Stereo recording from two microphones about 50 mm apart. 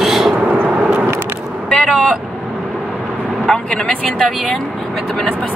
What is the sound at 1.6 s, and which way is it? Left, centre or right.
Vehicle, centre.